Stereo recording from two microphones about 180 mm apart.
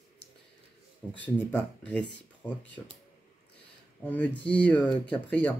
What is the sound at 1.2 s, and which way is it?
Speech, 10° left (ahead or behind).